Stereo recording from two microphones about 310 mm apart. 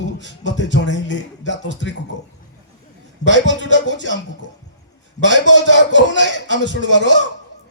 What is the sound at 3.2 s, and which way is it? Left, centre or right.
Speech, left.